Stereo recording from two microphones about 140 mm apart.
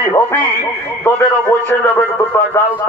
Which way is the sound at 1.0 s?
15° left (ahead or behind).